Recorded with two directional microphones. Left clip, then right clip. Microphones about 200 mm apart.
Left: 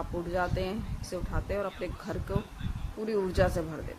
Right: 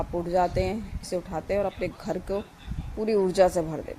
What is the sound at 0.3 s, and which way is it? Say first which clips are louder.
Speech: right 7 dB; 20° right (ahead or behind).